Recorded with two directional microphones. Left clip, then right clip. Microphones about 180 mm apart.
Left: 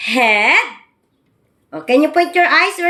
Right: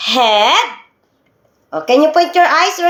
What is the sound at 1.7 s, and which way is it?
Speech, 35° right (ahead or behind).